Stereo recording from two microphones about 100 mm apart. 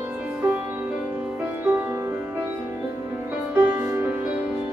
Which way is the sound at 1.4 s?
20° right (ahead or behind).